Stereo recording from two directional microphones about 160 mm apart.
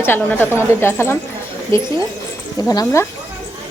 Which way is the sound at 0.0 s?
15° left (ahead or behind).